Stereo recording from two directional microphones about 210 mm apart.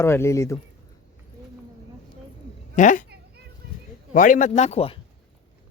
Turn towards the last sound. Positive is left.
turn(degrees=30)  # may be behind; listen again after turning